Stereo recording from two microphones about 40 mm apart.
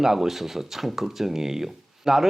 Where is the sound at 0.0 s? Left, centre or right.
Centre.